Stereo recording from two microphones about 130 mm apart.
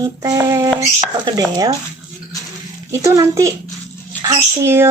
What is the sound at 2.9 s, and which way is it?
Speech, 25° right (ahead or behind).